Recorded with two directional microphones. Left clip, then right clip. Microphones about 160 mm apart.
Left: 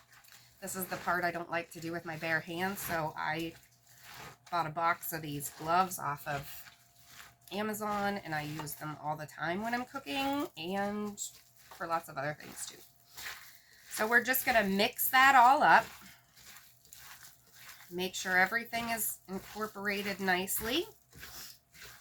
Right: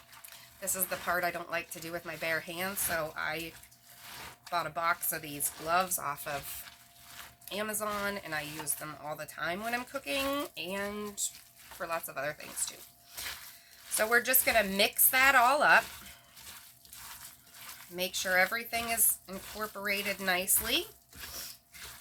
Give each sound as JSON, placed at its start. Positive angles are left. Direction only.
{"t": 0.7, "sound": "speech", "side_deg": -20}
{"t": 4.5, "sound": "speech", "side_deg": -20}
{"t": 7.5, "sound": "speech", "side_deg": -20}
{"t": 14.0, "sound": "speech", "side_deg": -15}
{"t": 17.9, "sound": "speech", "side_deg": -15}